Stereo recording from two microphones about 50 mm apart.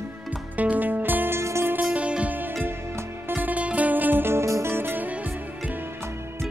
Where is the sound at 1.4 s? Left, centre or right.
Right.